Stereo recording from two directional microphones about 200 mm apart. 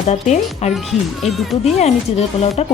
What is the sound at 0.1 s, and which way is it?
Speech, 35° left (ahead or behind).